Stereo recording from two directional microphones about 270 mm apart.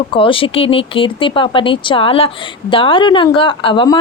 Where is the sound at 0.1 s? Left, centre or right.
Centre.